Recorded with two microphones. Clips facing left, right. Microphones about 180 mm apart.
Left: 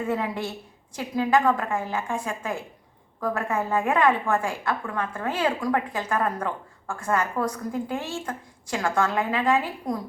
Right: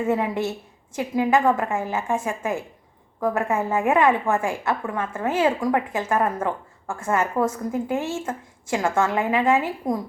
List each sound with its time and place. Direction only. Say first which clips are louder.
0.1 s a woman's voice: right 4 dB; 25° right (ahead or behind)